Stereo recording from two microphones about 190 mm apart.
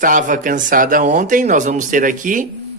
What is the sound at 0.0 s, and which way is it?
Speech, 45° right (ahead or behind).